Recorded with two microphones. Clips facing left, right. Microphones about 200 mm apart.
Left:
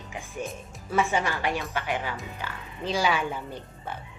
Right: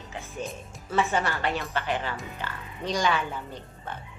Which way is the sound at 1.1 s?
10° left (ahead or behind).